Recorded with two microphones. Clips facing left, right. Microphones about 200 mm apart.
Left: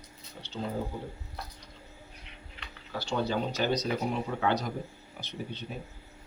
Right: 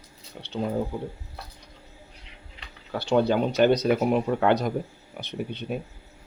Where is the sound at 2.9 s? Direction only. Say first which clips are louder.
Right 9 dB; 60° right (ahead or behind).